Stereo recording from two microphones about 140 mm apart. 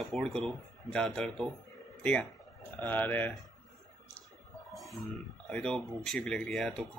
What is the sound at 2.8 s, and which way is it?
Speech, 10° left (ahead or behind).